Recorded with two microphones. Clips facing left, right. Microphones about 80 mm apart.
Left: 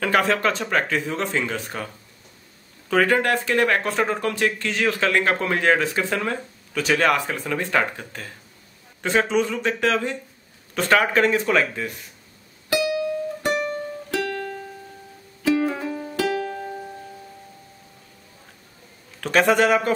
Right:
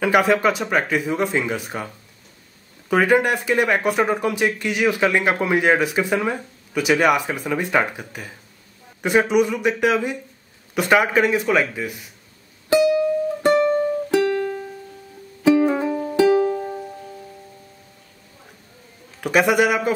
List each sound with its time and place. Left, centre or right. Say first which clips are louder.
0.0 s speech: right 3 dB; centre
2.9 s speech: right 2 dB; centre
12.6 s music: right 6 dB; right
15.4 s music: right 5 dB; right
19.2 s speech: right 1 dB; centre